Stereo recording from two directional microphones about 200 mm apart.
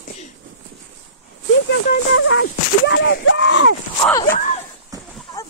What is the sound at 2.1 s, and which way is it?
Speech, 80° left.